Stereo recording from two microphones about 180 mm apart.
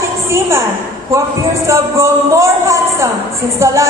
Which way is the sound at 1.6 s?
15° right (ahead or behind).